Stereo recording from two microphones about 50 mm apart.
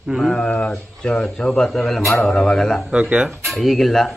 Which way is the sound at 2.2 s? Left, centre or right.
Centre.